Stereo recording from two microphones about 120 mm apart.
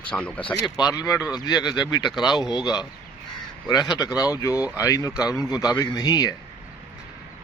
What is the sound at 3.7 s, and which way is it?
Speech, 35° left (ahead or behind).